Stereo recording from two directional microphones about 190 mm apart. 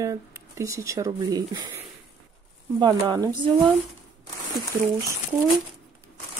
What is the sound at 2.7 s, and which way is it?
Speech, 20° right (ahead or behind).